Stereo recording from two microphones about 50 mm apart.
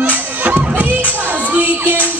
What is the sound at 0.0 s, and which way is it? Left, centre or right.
Crowd, right.